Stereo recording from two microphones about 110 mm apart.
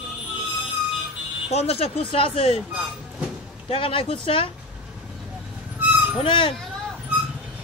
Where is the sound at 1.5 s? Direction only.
70° left (ahead or behind).